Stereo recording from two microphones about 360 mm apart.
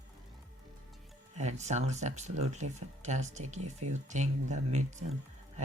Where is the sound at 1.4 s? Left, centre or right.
Centre.